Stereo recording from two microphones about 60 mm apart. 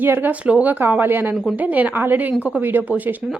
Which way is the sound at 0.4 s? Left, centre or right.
Right.